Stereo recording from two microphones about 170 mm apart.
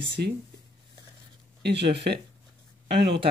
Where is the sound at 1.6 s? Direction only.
85° right.